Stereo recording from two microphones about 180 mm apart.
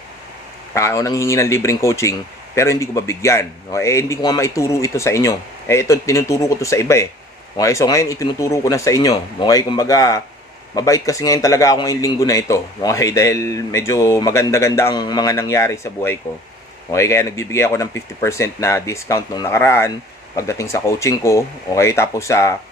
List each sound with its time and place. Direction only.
0.7 s speech: 15° left (ahead or behind)